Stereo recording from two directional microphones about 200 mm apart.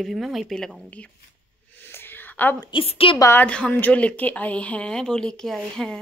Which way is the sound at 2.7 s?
30° left (ahead or behind).